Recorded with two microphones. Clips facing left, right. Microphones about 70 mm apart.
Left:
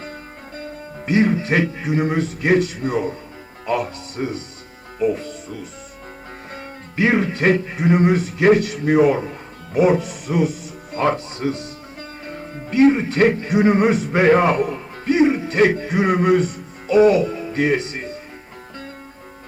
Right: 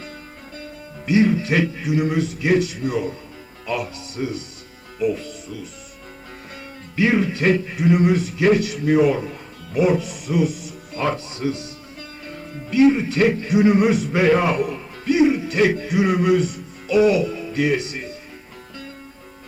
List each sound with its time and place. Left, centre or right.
0.0 s music: left
3.7 s speech: left